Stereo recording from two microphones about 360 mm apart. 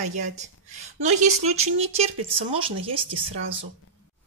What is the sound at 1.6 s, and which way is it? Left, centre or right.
Speech, centre.